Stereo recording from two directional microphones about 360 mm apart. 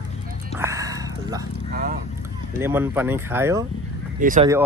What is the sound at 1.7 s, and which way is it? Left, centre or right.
Vehicle, right.